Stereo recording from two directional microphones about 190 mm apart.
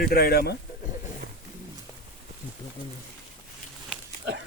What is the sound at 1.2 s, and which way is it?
Roaring cats, 50° right (ahead or behind).